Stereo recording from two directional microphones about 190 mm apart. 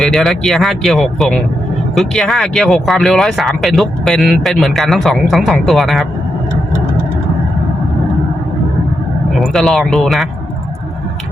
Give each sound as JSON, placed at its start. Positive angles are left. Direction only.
{"t": 0.0, "sound": "speech", "side_deg": 0}
{"t": 9.4, "sound": "speech", "side_deg": 0}